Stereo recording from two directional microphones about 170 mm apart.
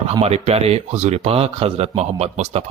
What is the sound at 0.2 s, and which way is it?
Speech, 40° right (ahead or behind).